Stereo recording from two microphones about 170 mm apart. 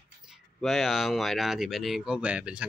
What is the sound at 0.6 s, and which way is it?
Speech, centre (ahead or behind).